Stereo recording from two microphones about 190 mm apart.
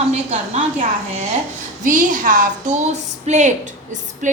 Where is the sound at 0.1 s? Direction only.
35° right (ahead or behind).